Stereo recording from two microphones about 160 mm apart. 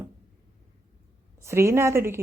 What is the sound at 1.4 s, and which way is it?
Speech, 15° right (ahead or behind).